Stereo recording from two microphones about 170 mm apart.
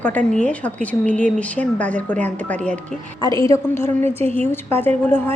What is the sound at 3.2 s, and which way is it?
A woman's voice, 20° left (ahead or behind).